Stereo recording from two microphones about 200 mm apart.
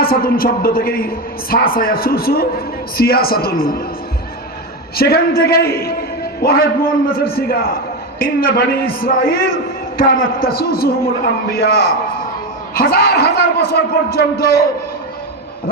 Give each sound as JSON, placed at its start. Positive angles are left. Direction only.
{"t": 0.0, "sound": "a woman's voice", "side_deg": 50}
{"t": 4.9, "sound": "a woman's voice", "side_deg": 50}
{"t": 10.4, "sound": "a woman's voice", "side_deg": 50}